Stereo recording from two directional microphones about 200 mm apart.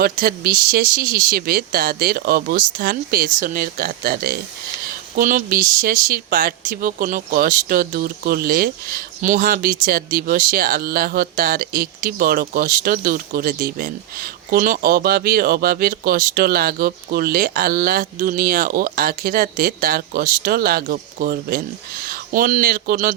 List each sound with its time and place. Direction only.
0.0 s speech: 50° right (ahead or behind)